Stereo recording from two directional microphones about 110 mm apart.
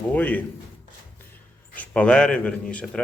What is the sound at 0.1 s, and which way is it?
Speech, 15° left (ahead or behind).